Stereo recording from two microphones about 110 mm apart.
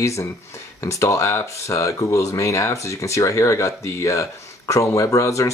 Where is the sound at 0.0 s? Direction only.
25° left (ahead or behind).